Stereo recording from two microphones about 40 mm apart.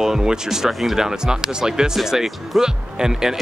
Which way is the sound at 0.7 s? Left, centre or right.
Centre.